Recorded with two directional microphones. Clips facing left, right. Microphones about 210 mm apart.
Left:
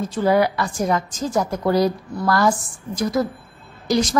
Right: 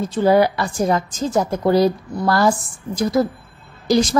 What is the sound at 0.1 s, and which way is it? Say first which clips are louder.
A woman's voice: right 3 dB; 30° right (ahead or behind).